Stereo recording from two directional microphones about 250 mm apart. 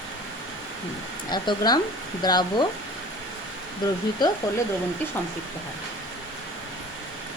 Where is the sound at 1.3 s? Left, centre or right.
Centre.